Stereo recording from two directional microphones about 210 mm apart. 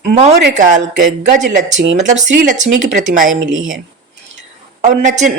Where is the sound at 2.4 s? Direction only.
40° right (ahead or behind).